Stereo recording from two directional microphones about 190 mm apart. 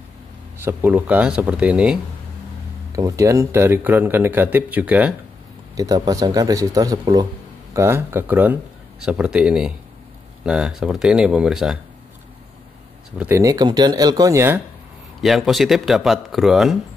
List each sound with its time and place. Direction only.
0.6 s speech: 10° right (ahead or behind)
2.9 s speech: 15° right (ahead or behind)
5.8 s speech: 20° right (ahead or behind); by 11.8 s 5° right (ahead or behind)
13.2 s speech: 15° right (ahead or behind)
15.2 s speech: centre (ahead or behind)